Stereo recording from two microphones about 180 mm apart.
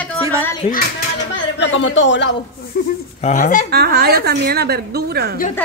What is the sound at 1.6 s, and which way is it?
Speech, 90° left.